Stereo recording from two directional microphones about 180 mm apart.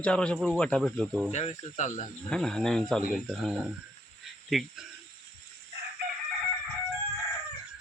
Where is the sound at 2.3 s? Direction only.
5° left (ahead or behind).